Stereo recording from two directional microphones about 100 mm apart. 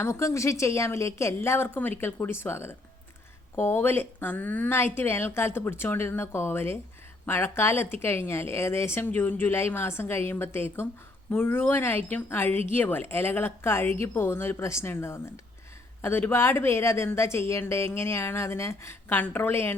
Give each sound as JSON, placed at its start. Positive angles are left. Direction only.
{"t": 0.0, "sound": "speech", "side_deg": 30}